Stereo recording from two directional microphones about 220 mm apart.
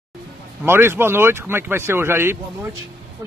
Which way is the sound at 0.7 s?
10° right (ahead or behind).